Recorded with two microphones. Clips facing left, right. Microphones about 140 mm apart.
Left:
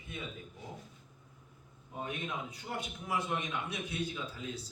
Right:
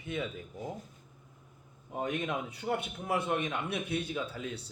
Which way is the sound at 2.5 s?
60° right (ahead or behind).